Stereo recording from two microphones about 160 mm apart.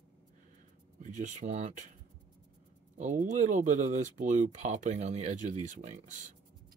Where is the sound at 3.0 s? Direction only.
50° right (ahead or behind).